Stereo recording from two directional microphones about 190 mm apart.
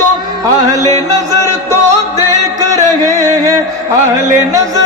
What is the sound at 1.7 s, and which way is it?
Music, 20° right (ahead or behind).